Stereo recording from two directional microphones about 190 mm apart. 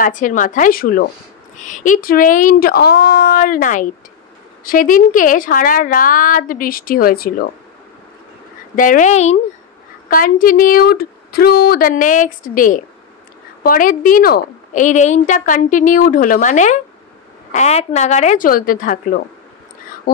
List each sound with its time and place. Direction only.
0.0 s a woman's voice: 40° left (ahead or behind)
8.7 s a woman's voice: 45° left (ahead or behind)